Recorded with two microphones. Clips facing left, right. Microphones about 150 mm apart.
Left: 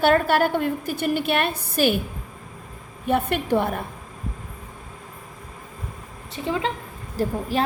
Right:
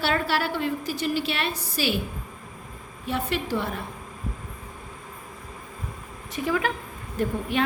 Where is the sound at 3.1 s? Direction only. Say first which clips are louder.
Left 6 dB; 55° left (ahead or behind).